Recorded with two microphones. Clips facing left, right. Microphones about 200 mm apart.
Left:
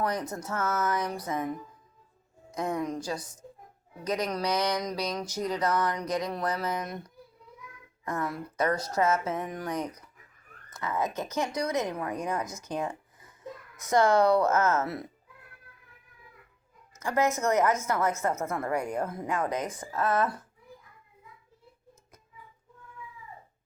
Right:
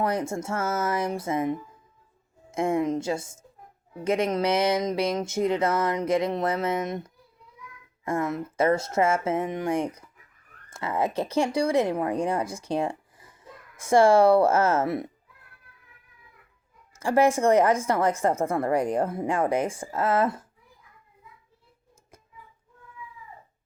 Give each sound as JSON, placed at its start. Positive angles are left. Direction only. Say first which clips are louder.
{"t": 0.0, "sound": "a woman's voice", "louder": "right 4 dB", "side_deg": -25}
{"t": 16.9, "sound": "a woman's voice", "louder": "right 6 dB", "side_deg": -30}